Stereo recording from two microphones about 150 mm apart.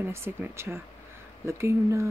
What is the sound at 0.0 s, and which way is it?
Speech, 15° right (ahead or behind).